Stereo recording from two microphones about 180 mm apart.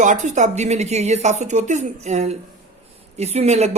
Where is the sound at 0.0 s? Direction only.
45° right (ahead or behind).